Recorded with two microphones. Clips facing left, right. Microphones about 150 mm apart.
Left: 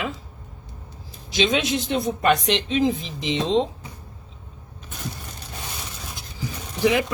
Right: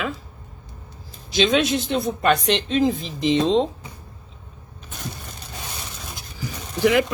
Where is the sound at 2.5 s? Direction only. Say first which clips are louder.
Right 1 dB; 50° right (ahead or behind).